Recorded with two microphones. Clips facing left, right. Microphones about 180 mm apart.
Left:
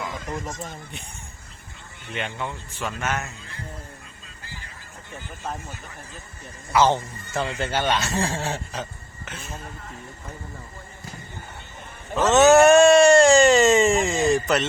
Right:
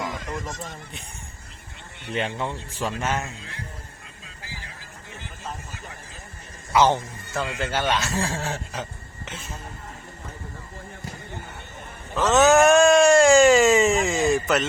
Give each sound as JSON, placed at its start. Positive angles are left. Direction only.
{"t": 0.6, "sound": "speech", "side_deg": 0}
{"t": 2.0, "sound": "speech", "side_deg": -35}
{"t": 6.7, "sound": "speech", "side_deg": -15}
{"t": 7.9, "sound": "speech", "side_deg": 10}
{"t": 8.1, "sound": "speech", "side_deg": -5}
{"t": 8.7, "sound": "a sound", "side_deg": -10}
{"t": 12.1, "sound": "speech", "side_deg": 0}